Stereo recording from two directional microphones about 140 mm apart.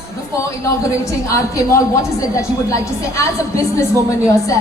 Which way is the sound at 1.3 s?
20° left (ahead or behind).